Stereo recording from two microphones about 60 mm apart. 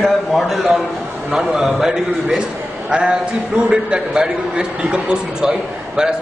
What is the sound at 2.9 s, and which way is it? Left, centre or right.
A man's voice, centre.